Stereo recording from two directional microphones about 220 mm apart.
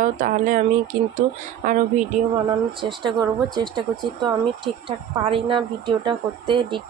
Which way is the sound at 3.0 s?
20° right (ahead or behind).